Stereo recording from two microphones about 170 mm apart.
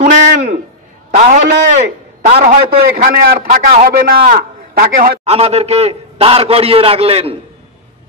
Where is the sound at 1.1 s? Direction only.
45° right (ahead or behind).